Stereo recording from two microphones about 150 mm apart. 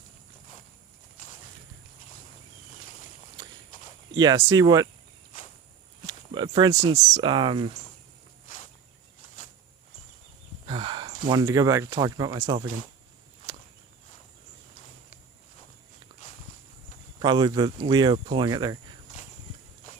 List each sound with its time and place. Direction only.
4.1 s speech: 30° right (ahead or behind)
6.3 s a sound: 30° right (ahead or behind)
6.9 s speech: 40° right (ahead or behind)
10.7 s speech: 35° right (ahead or behind)
17.2 s speech: 30° right (ahead or behind)